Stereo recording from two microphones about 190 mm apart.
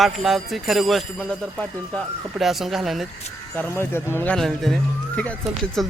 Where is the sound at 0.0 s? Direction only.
Centre (ahead or behind).